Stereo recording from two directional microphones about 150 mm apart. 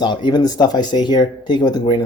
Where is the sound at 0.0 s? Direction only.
30° left (ahead or behind).